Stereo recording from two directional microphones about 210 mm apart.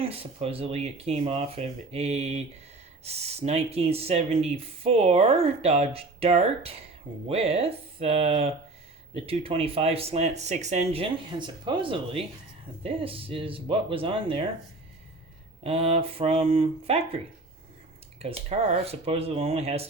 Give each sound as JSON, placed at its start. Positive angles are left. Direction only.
{"t": 0.0, "sound": "speech", "side_deg": -25}
{"t": 15.6, "sound": "speech", "side_deg": -30}
{"t": 18.2, "sound": "speech", "side_deg": -30}